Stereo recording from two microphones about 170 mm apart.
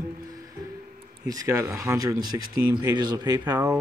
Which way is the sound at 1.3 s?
20° right (ahead or behind).